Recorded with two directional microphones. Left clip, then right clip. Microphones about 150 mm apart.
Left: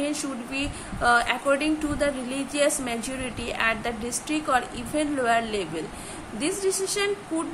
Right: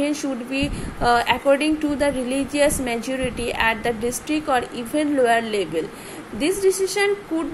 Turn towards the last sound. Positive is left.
turn(degrees=-15)  # may be behind; listen again after turning